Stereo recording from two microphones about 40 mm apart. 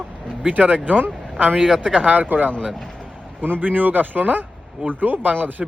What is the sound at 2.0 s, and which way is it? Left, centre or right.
A man's voice, right.